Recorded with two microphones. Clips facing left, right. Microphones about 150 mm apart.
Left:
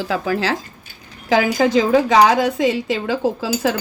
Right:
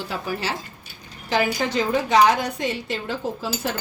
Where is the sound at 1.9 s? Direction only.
90° left.